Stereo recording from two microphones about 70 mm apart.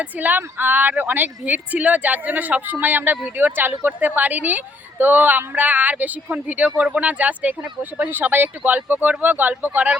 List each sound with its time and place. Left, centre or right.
0.0 s speech: right